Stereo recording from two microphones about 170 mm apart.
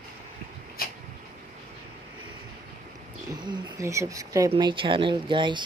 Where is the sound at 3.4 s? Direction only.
20° right (ahead or behind).